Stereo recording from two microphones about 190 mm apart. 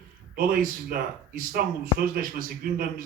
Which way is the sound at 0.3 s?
50° right (ahead or behind).